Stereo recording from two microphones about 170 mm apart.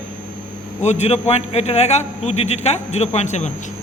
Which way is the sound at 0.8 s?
40° left (ahead or behind).